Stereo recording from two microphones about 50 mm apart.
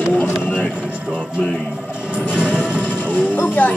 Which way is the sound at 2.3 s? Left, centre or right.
Right.